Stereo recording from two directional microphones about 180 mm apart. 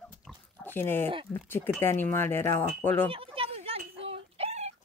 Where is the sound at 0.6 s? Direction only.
10° left (ahead or behind).